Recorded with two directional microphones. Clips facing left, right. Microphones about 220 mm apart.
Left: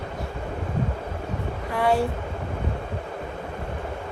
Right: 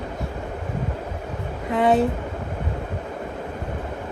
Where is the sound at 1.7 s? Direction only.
20° right (ahead or behind).